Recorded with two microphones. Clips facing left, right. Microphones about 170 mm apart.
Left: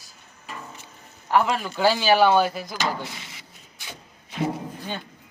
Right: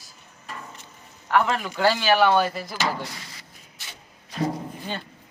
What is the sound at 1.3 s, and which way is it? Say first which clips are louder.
Speech: left 1 dB; 5° left (ahead or behind).